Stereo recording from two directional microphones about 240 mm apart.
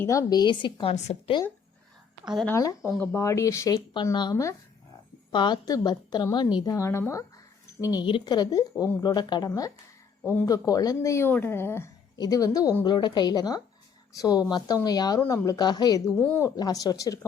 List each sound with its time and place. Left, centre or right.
0.0 s speech: centre
2.3 s speech: centre
2.6 s speech: centre